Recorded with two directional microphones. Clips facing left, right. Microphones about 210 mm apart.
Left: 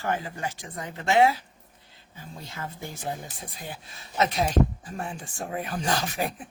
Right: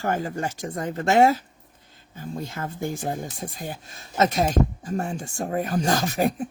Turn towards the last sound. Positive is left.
turn(degrees=-45)  # may be behind; listen again after turning